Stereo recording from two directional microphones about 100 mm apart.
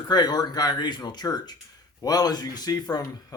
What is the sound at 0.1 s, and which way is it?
Speech, 45° left (ahead or behind).